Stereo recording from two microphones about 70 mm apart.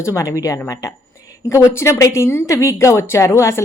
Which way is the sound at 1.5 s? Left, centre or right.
Left.